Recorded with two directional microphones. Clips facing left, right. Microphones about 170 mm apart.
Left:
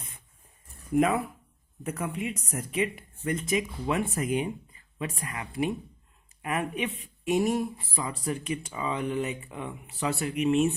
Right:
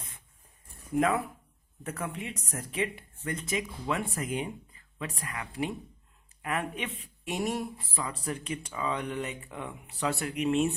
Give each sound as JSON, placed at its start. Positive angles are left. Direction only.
{"t": 0.9, "sound": "speech", "side_deg": 10}